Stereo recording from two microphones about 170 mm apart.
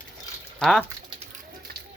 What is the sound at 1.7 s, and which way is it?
Run, 65° right (ahead or behind).